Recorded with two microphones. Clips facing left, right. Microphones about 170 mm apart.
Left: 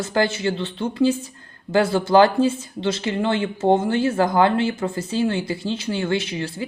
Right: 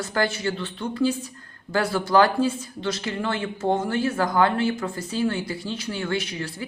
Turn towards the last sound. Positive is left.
turn(degrees=25)  # may be behind; listen again after turning